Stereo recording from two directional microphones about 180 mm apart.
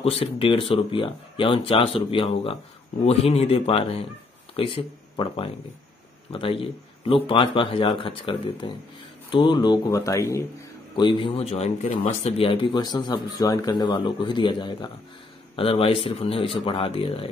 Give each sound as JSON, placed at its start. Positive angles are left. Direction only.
{"t": 0.0, "sound": "speech", "side_deg": 30}